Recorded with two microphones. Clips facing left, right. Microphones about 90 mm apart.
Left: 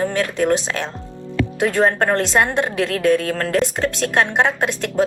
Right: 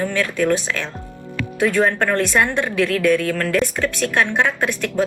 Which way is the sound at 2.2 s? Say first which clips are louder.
Left 1 dB; 20° left (ahead or behind).